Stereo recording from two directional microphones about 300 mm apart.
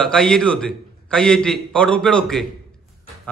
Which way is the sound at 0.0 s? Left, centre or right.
Centre.